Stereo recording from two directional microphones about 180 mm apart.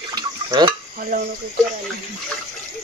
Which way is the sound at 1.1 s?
50° right (ahead or behind).